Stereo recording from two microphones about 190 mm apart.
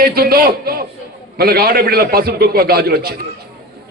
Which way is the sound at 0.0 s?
55° right (ahead or behind).